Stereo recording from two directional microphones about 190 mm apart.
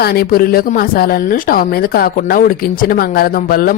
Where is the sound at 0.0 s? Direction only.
55° left (ahead or behind).